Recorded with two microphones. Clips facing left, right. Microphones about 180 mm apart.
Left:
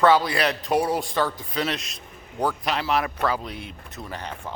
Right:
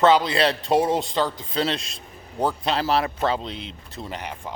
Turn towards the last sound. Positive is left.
turn(degrees=-15)  # may be behind; listen again after turning